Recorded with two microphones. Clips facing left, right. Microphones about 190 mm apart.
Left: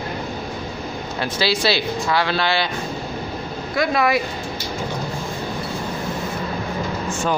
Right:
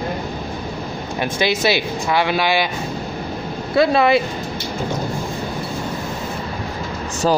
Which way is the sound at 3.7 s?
30° right (ahead or behind).